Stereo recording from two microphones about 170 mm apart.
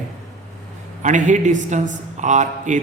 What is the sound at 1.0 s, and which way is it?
Speech, 45° right (ahead or behind).